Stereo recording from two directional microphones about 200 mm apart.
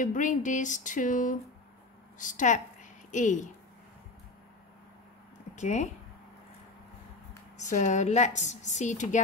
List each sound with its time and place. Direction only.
0.0 s a woman's voice: 40° left (ahead or behind)
5.6 s a woman's voice: 35° left (ahead or behind)
7.5 s a woman's voice: 35° left (ahead or behind)